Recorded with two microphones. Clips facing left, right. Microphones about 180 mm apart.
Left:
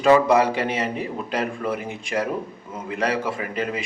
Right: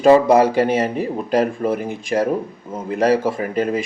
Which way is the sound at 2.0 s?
40° right (ahead or behind).